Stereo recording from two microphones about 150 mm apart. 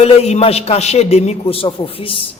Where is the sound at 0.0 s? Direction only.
45° left (ahead or behind).